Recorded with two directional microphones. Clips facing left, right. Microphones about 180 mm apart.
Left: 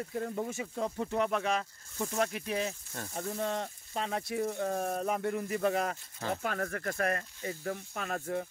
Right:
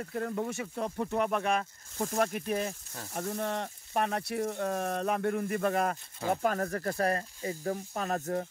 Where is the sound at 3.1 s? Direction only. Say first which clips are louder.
Right 1 dB; 60° right (ahead or behind).